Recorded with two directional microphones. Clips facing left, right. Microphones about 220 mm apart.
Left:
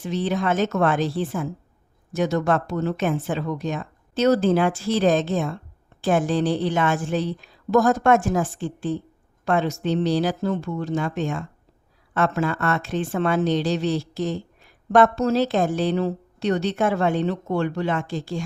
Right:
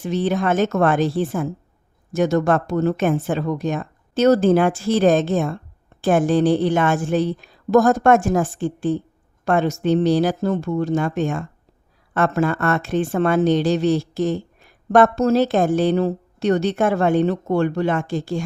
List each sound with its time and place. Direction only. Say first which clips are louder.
0.0 s a woman's voice: right 3 dB; 50° right (ahead or behind)